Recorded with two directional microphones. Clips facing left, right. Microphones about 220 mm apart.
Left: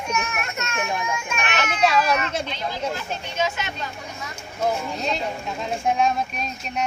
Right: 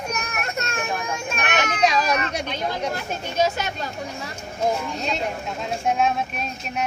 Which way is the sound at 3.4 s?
40° right (ahead or behind).